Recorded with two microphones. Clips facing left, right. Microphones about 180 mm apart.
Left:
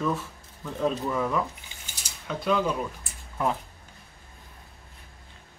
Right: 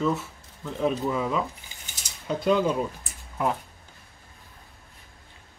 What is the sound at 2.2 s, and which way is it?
Speech, 30° right (ahead or behind).